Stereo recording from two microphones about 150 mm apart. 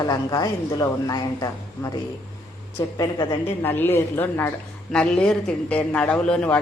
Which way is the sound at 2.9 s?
25° left (ahead or behind).